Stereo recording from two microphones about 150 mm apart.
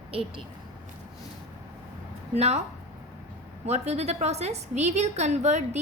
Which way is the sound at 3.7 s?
45° right (ahead or behind).